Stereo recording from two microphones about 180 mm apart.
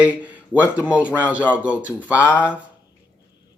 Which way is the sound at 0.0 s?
10° right (ahead or behind).